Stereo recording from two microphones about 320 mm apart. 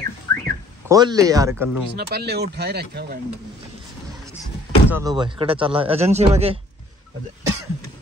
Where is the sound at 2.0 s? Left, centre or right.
Right.